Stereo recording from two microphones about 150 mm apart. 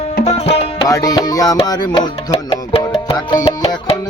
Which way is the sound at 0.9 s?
25° left (ahead or behind).